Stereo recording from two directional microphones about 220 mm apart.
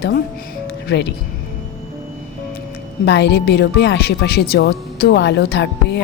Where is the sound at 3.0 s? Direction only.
50° left (ahead or behind).